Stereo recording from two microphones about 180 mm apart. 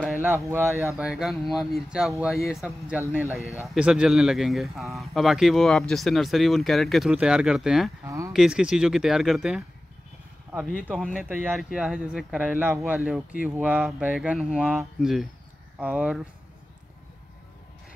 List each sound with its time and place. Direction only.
0.2 s speech: 10° right (ahead or behind)
8.0 s speech: 15° right (ahead or behind)
8.3 s speech: centre (ahead or behind)
11.1 s speech: 10° right (ahead or behind)